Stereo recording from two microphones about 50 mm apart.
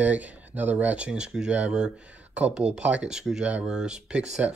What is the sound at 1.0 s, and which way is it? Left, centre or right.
Speech, centre.